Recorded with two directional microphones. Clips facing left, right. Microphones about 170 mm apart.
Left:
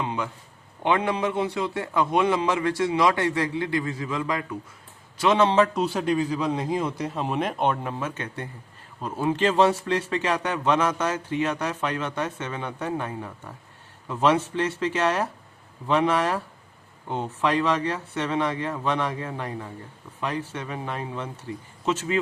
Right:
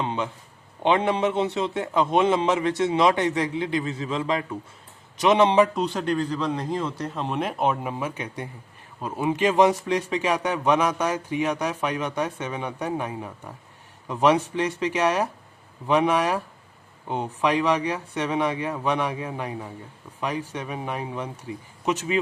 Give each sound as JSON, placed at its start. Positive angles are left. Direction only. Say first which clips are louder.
{"t": 0.0, "sound": "a sound", "louder": "right 2 dB", "side_deg": -30}
{"t": 0.8, "sound": "a man's voice", "louder": "right 2 dB", "side_deg": -25}
{"t": 5.7, "sound": "speech", "louder": "left 1 dB", "side_deg": 5}